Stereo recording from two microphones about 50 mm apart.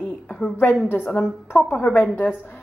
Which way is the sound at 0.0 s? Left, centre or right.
Centre.